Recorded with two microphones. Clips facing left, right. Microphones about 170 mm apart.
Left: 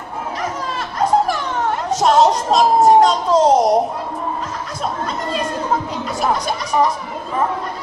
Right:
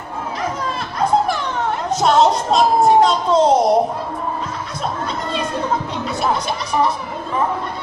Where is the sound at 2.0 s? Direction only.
40° left (ahead or behind).